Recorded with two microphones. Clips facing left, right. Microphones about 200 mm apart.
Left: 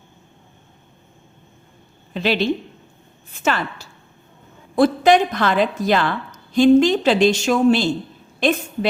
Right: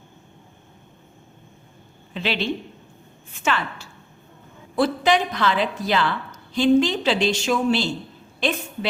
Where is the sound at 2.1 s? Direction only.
40° left (ahead or behind).